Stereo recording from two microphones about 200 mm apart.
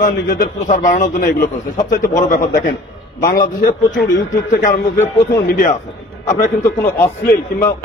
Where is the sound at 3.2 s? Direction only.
45° left (ahead or behind).